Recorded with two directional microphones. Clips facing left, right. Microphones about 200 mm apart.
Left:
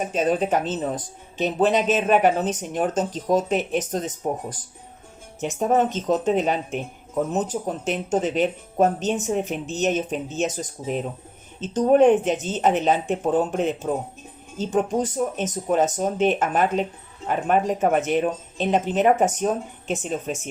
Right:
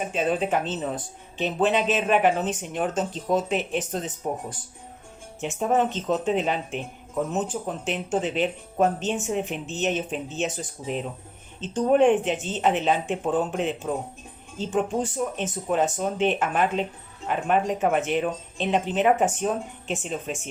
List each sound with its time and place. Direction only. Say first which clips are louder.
0.1 s speech: left 3 dB; 40° left (ahead or behind)